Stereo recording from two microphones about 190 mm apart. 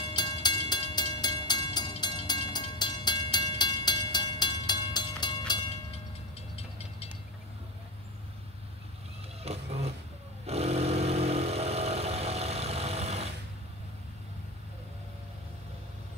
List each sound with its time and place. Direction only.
0.1 s train: 20° left (ahead or behind)
6.5 s train: 30° left (ahead or behind)
9.4 s a sound: 35° right (ahead or behind)
10.4 s vehicle: 35° right (ahead or behind)